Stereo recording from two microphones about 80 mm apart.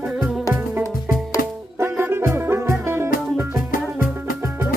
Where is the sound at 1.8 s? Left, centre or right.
Right.